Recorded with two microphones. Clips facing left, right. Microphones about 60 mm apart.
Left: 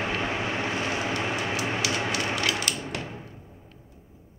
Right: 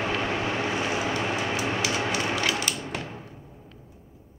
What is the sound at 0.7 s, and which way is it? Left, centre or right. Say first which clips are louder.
Train: right 1 dB; centre.